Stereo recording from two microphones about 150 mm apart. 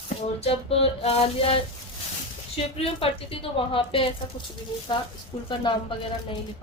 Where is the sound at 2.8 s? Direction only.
40° left (ahead or behind).